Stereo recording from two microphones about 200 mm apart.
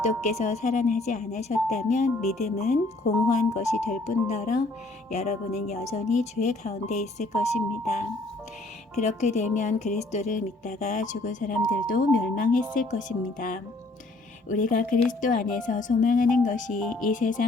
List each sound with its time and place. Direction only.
0.0 s speech: 35° left (ahead or behind)
9.0 s speech: 35° left (ahead or behind)